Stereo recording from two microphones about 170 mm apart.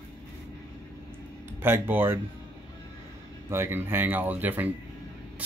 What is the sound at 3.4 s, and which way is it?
Speech, 15° right (ahead or behind).